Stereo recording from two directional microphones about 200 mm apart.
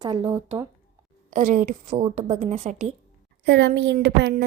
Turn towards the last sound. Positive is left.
turn(degrees=-55)  # may be behind; listen again after turning